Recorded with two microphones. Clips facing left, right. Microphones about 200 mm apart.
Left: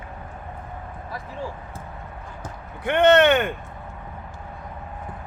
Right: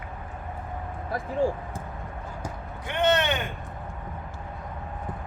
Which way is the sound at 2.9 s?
60° left (ahead or behind).